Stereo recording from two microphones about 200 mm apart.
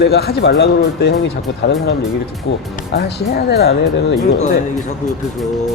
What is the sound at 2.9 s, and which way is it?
Speech, 55° left (ahead or behind).